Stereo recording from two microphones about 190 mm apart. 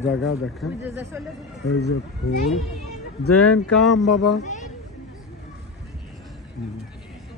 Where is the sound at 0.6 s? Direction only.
10° right (ahead or behind).